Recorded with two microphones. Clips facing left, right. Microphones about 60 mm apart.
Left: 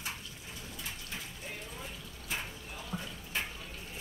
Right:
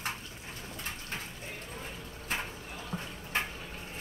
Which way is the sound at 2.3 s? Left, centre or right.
Right.